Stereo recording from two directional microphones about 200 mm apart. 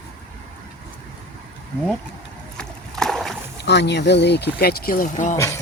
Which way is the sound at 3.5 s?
60° left (ahead or behind).